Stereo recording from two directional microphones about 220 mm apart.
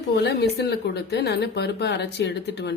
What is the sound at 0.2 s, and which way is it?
Speech, 50° left (ahead or behind).